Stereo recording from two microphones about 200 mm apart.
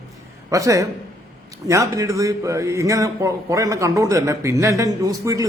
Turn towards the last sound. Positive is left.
turn(degrees=-15)  # may be behind; listen again after turning